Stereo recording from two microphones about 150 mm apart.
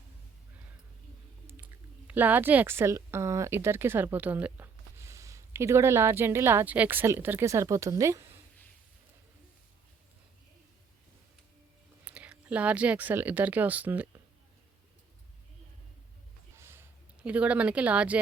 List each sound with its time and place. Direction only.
1.5 s speech: 10° right (ahead or behind)
12.0 s speech: 10° right (ahead or behind)
16.6 s a sound: 15° right (ahead or behind)
17.2 s speech: 10° right (ahead or behind)